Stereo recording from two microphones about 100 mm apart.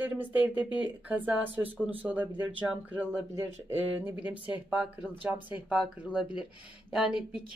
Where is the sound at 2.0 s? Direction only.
5° right (ahead or behind).